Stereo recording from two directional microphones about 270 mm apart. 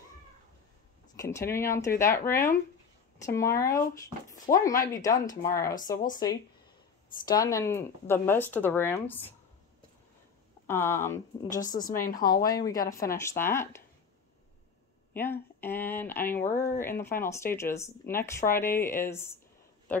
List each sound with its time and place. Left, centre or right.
1.1 s speech: centre
7.2 s speech: centre
10.7 s speech: centre
12.0 s speech: left
12.4 s speech: centre
15.1 s speech: centre